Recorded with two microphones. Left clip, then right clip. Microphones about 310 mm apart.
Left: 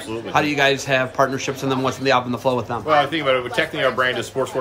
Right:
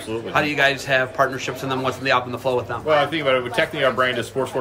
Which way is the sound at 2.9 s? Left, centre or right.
Centre.